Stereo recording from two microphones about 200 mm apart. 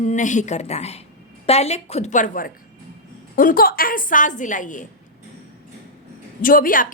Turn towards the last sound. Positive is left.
turn(degrees=45)  # may be behind; listen again after turning